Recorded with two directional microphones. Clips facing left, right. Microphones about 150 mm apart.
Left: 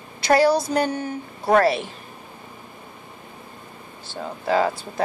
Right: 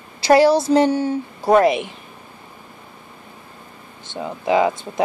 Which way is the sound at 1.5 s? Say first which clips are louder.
Right 3 dB; 15° right (ahead or behind).